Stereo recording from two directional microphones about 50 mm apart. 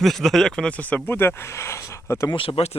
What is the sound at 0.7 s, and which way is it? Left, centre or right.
Speech, left.